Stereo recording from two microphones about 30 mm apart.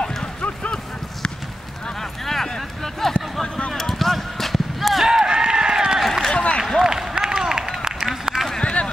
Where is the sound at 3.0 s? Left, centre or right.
Centre.